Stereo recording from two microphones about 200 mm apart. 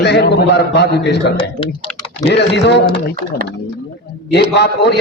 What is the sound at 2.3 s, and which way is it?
Speech, 60° left (ahead or behind).